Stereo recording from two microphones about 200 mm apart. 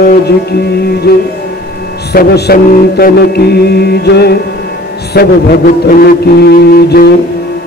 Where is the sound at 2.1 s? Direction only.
50° left (ahead or behind).